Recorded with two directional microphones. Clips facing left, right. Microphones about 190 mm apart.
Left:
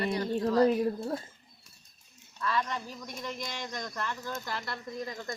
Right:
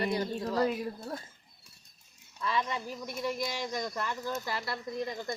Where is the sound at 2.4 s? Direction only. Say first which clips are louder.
Even; 10° right (ahead or behind).